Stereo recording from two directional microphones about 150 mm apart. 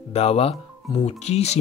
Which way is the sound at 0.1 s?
45° left (ahead or behind).